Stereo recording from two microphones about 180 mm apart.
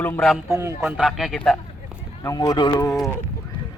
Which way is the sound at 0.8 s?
5° right (ahead or behind).